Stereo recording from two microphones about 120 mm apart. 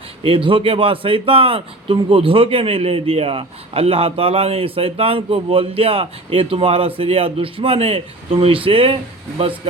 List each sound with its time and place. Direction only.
0.2 s speech: 45° right (ahead or behind)